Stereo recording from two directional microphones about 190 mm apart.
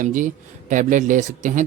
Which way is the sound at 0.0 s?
45° right (ahead or behind).